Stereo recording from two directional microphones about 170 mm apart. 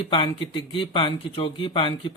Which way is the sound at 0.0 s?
30° left (ahead or behind).